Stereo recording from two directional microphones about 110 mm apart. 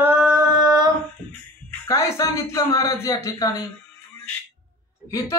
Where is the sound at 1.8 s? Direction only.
30° left (ahead or behind).